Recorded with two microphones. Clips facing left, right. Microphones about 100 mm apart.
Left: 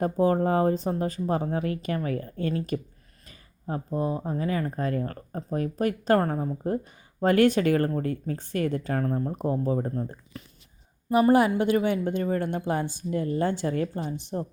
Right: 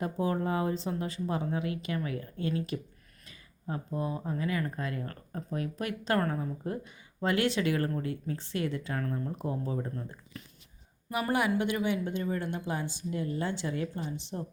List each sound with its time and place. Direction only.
0.0 s speech: 45° left (ahead or behind)